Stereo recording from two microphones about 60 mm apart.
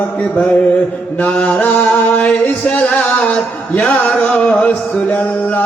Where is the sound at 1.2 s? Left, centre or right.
Left.